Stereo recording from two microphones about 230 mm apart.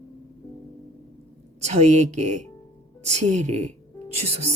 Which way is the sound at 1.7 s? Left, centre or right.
Right.